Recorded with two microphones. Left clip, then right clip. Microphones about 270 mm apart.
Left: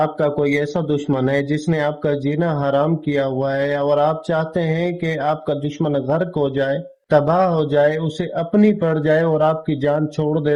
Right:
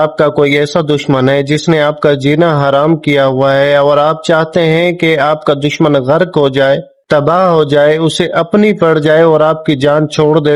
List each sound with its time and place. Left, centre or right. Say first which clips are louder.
0.0 s a man's voice: right 9 dB; right